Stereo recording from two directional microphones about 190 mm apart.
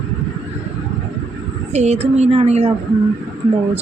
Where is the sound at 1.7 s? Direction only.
35° right (ahead or behind).